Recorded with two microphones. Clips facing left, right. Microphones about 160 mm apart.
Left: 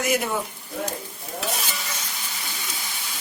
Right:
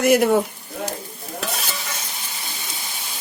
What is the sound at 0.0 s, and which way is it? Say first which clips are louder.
Sizzle: right 9 dB; 60° right (ahead or behind).